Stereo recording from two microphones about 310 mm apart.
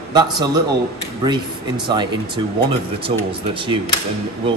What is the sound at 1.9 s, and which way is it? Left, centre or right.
A man's voice, centre.